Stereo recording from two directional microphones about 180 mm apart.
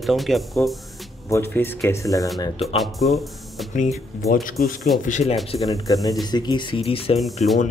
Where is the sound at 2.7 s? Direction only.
Centre (ahead or behind).